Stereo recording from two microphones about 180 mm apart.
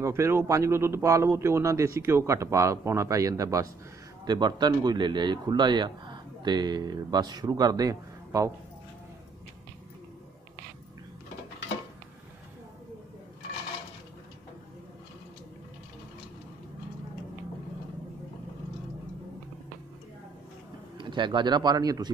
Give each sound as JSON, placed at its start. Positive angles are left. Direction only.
{"t": 0.0, "sound": "a man's voice", "side_deg": -15}
{"t": 21.0, "sound": "a man's voice", "side_deg": -25}